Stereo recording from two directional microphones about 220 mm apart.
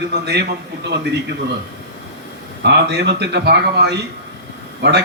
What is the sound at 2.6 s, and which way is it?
A man's voice, 50° right (ahead or behind).